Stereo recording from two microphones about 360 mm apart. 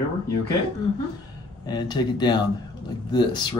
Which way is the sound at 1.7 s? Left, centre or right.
Centre.